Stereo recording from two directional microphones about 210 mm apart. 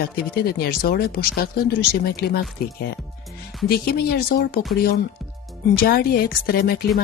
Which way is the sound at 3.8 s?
50° left (ahead or behind).